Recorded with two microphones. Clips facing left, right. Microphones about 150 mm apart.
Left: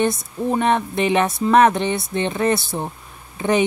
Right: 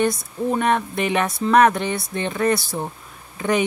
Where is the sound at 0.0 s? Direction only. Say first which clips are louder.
Left 1 dB; 25° left (ahead or behind).